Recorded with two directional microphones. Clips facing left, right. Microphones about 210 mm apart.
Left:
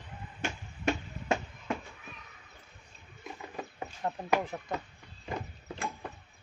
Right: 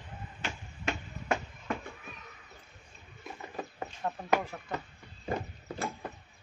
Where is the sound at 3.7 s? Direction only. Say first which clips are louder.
Left 2 dB; 15° left (ahead or behind).